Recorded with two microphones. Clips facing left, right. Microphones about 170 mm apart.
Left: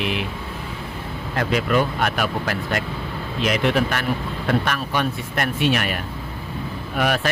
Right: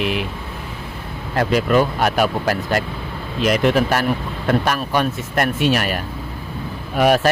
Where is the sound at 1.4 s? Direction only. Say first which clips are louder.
Right 4 dB; 40° right (ahead or behind).